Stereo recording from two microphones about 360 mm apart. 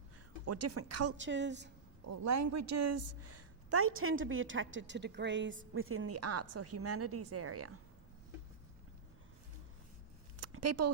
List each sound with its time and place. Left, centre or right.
0.4 s speech: right
1.1 s a woman's voice: right
2.0 s speech: right
10.3 s a sound: right